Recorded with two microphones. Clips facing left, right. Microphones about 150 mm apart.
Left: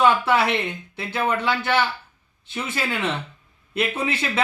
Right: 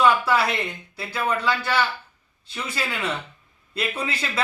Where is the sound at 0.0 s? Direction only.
25° left (ahead or behind).